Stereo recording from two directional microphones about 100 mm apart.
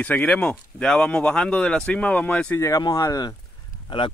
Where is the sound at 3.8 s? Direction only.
55° left (ahead or behind).